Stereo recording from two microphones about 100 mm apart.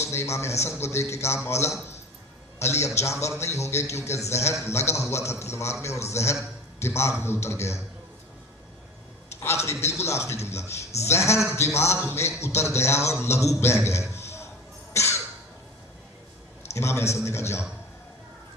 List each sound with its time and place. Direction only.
0.0 s a man's voice: 25° left (ahead or behind)
9.4 s a man's voice: 25° left (ahead or behind)
14.2 s a sound: 25° left (ahead or behind)
14.9 s cough: 25° left (ahead or behind)
16.7 s a man's voice: 30° left (ahead or behind)